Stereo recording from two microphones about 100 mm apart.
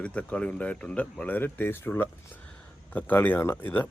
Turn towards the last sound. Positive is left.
turn(degrees=20)  # may be behind; listen again after turning